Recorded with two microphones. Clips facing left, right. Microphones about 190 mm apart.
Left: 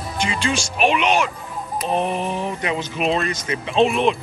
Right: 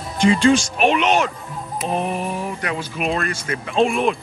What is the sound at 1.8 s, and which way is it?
Music, 5° right (ahead or behind).